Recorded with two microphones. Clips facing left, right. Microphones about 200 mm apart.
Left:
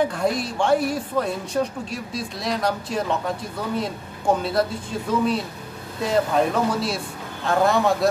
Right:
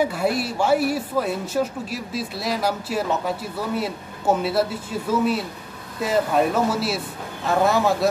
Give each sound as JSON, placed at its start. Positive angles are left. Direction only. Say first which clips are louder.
{"t": 0.0, "sound": "speech", "louder": "even", "side_deg": -5}